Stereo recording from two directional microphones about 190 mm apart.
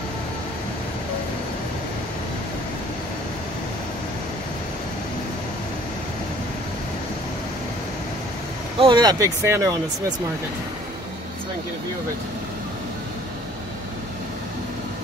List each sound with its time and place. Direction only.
8.7 s speech: 25° right (ahead or behind)